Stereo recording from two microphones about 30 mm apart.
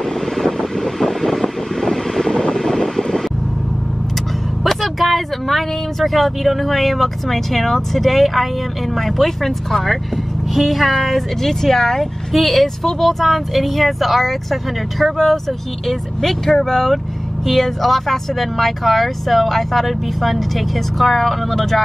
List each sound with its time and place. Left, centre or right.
0.5 s vehicle: centre
1.9 s vehicle: centre
4.6 s speech: centre
15.9 s speech: centre